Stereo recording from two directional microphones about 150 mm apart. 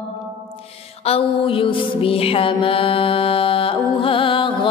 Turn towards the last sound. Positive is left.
turn(degrees=35)  # may be behind; listen again after turning